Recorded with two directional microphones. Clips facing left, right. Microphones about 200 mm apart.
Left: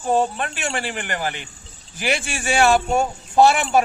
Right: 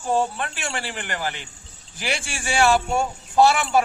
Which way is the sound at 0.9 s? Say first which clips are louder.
Left 3 dB; 50° left (ahead or behind).